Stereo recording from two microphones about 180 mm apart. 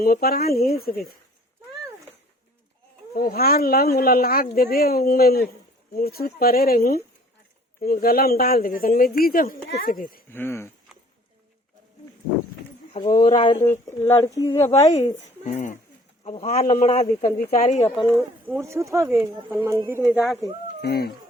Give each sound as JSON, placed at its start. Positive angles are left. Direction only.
{"t": 0.0, "sound": "speech", "side_deg": 55}
{"t": 3.2, "sound": "speech", "side_deg": 55}
{"t": 10.3, "sound": "speech", "side_deg": 15}
{"t": 13.1, "sound": "speech", "side_deg": 25}
{"t": 13.7, "sound": "speech", "side_deg": 15}
{"t": 14.8, "sound": "speech", "side_deg": 40}
{"t": 17.3, "sound": "speech", "side_deg": 50}
{"t": 18.6, "sound": "speech", "side_deg": -15}
{"t": 20.8, "sound": "speech", "side_deg": 60}